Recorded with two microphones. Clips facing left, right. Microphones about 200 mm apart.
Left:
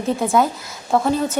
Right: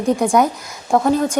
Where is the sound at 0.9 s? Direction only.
Centre (ahead or behind).